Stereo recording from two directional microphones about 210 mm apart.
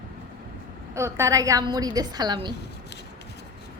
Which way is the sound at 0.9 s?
15° right (ahead or behind).